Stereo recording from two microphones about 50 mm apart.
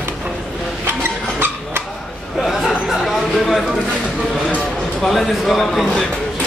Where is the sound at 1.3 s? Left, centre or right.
Right.